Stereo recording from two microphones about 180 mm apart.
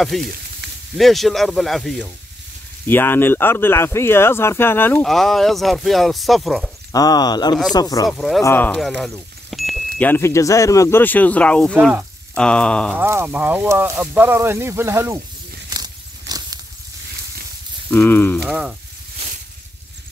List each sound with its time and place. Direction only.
0.2 s sizzle: 60° right (ahead or behind)
0.9 s speech: centre (ahead or behind)
2.9 s speech: 10° left (ahead or behind)
5.0 s speech: centre (ahead or behind)
6.9 s speech: 20° left (ahead or behind)
8.1 s speech: centre (ahead or behind)
9.9 s speech: 10° left (ahead or behind)
11.7 s speech: 10° right (ahead or behind)
12.4 s speech: 5° left (ahead or behind)
12.9 s speech: 15° right (ahead or behind)
15.7 s a sound: 20° right (ahead or behind)
17.9 s speech: 10° left (ahead or behind)
18.4 s speech: 5° right (ahead or behind)